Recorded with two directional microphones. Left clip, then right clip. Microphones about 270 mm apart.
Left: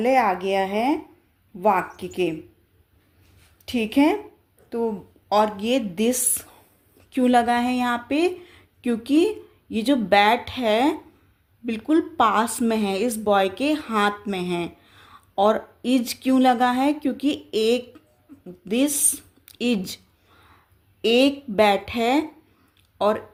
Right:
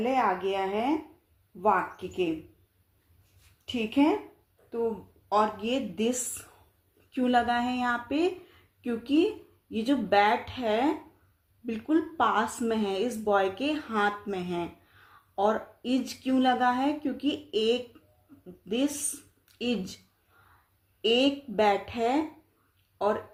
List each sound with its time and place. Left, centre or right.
0.0 s speech: left
3.7 s speech: left
5.3 s speech: left
21.0 s speech: left